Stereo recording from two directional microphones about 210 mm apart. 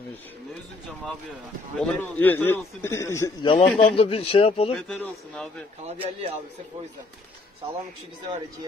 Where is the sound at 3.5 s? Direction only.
25° left (ahead or behind).